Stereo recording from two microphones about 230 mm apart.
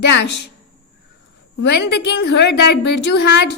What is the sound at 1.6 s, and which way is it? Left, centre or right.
A woman's voice, left.